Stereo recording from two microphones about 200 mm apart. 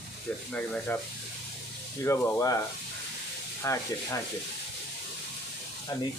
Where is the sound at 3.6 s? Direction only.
15° left (ahead or behind).